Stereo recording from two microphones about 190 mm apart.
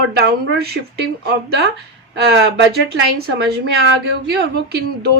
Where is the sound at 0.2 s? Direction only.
55° right (ahead or behind).